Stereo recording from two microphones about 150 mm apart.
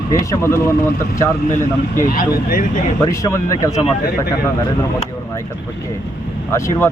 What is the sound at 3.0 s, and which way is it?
Speech, 20° left (ahead or behind).